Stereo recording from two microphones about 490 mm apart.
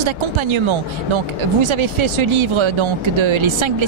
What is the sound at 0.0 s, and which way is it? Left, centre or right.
Speech, right.